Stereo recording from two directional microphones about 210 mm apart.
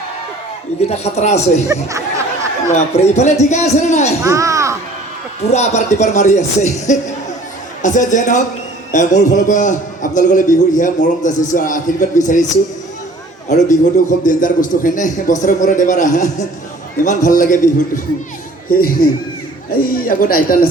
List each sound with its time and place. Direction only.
0.8 s a man's voice: 30° left (ahead or behind)
1.6 s speech: 15° right (ahead or behind)
2.7 s a man's voice: 30° left (ahead or behind)
4.2 s a sound: 15° right (ahead or behind)
5.5 s a man's voice: 35° left (ahead or behind)
13.5 s a man's voice: 35° left (ahead or behind)
19.9 s a man's voice: 40° left (ahead or behind)